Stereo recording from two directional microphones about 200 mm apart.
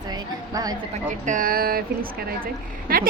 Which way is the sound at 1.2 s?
45° right (ahead or behind).